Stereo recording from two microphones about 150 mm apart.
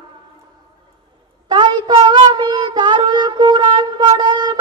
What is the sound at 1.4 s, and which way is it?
Child singing, 30° right (ahead or behind).